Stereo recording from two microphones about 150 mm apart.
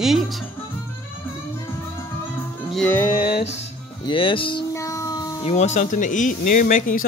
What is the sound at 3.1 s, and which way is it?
Music, 80° left.